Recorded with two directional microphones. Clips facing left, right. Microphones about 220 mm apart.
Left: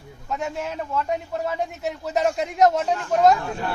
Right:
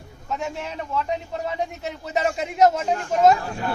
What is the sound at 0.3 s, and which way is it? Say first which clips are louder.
Speech: left 1 dB; centre (ahead or behind).